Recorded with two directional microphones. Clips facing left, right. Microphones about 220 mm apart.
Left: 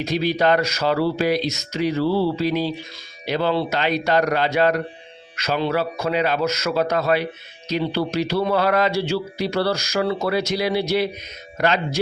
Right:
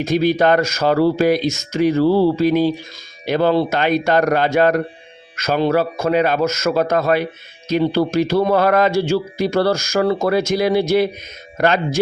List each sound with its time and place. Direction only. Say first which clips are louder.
0.0 s speech: right 5 dB; 50° right (ahead or behind)